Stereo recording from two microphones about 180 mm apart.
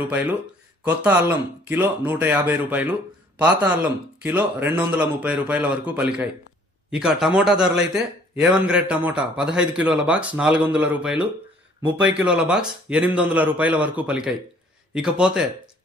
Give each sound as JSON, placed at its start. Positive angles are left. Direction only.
{"t": 0.1, "sound": "a man's voice", "side_deg": -10}
{"t": 11.9, "sound": "speech", "side_deg": -75}
{"t": 12.2, "sound": "a man's voice", "side_deg": -5}